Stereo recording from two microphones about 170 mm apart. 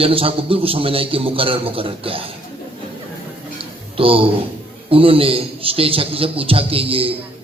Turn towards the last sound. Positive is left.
turn(degrees=-35)  # may be behind; listen again after turning